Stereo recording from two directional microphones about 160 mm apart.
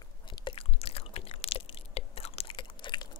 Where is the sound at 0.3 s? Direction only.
30° left (ahead or behind).